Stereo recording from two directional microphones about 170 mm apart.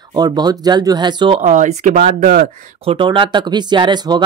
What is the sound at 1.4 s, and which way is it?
Speech, 45° right (ahead or behind).